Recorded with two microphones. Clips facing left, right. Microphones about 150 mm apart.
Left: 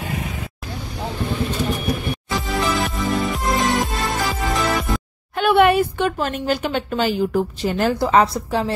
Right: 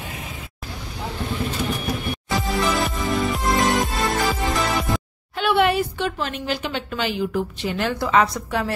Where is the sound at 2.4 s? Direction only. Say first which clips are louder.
Even; centre (ahead or behind).